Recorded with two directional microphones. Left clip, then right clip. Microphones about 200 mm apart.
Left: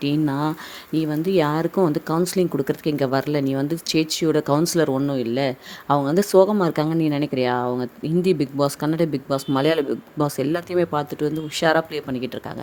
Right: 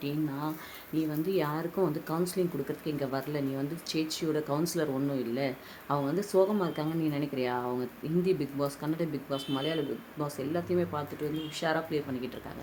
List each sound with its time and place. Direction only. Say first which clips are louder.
0.0 s speech: left 12 dB; 50° left (ahead or behind)
0.9 s speech: left 10 dB; 40° left (ahead or behind)